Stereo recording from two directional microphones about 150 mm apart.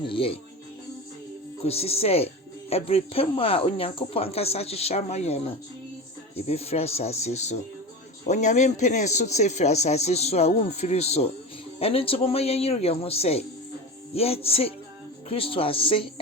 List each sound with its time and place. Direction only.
0.0 s speech: 35° left (ahead or behind)
1.6 s speech: 40° left (ahead or behind)